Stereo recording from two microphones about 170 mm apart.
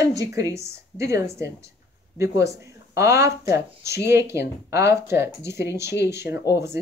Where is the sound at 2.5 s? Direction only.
15° right (ahead or behind).